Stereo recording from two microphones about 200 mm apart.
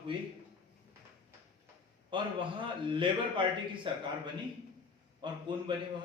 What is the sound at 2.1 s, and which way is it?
A man's voice, 25° right (ahead or behind).